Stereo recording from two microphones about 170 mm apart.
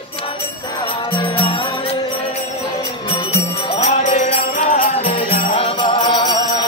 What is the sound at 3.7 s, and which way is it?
Jingle bell, 45° left (ahead or behind).